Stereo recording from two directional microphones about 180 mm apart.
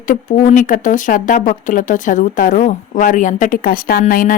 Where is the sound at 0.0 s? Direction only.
45° left (ahead or behind).